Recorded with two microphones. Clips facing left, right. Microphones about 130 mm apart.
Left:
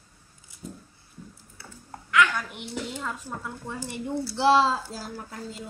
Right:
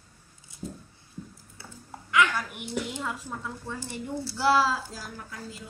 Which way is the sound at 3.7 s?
20° left (ahead or behind).